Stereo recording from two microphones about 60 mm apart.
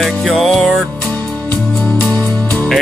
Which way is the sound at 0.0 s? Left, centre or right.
Centre.